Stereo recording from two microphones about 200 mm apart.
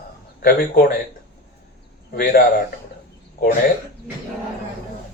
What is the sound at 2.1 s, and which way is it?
Speech, 50° left (ahead or behind).